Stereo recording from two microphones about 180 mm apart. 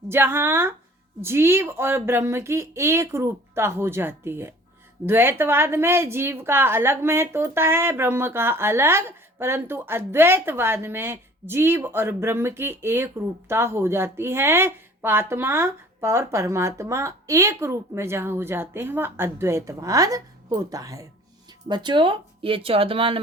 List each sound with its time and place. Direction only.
0.1 s a woman's voice: 10° right (ahead or behind); by 23.2 s 30° right (ahead or behind)